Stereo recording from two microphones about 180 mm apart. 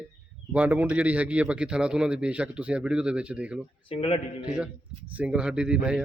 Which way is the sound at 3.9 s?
30° left (ahead or behind).